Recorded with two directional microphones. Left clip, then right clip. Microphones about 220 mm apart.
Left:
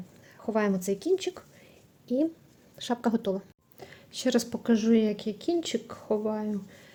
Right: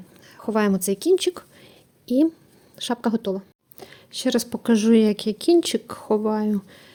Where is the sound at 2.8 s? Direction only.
25° right (ahead or behind).